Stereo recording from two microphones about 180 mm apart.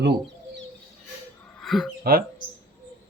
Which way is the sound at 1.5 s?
Centre (ahead or behind).